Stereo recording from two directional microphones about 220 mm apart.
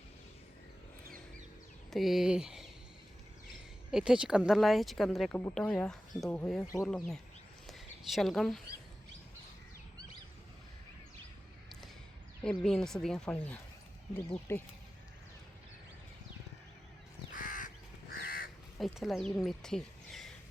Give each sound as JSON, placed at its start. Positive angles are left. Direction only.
{"t": 1.9, "sound": "speech", "side_deg": 0}
{"t": 3.9, "sound": "speech", "side_deg": -5}
{"t": 7.7, "sound": "a sound", "side_deg": 0}
{"t": 12.4, "sound": "speech", "side_deg": 5}
{"t": 17.3, "sound": "crow", "side_deg": 35}
{"t": 18.8, "sound": "speech", "side_deg": 0}
{"t": 19.5, "sound": "a sound", "side_deg": 0}